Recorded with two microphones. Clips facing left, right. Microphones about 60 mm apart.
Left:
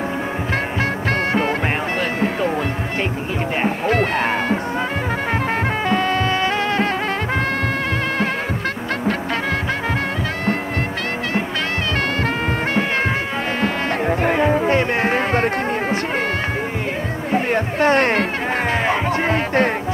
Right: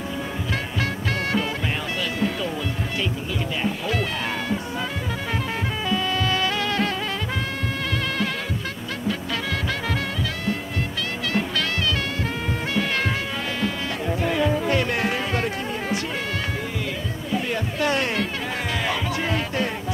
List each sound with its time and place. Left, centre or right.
2.1 s music: left
3.6 s music: left
5.9 s music: left
13.6 s music: left
17.3 s music: left